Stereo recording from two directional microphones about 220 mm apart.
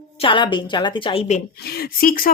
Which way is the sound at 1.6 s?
45° left (ahead or behind).